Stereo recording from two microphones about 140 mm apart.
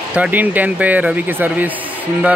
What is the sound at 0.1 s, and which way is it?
Speech, 10° right (ahead or behind).